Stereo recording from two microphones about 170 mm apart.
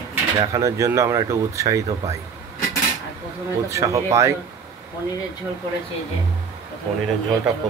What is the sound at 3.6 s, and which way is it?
Speech, 15° right (ahead or behind).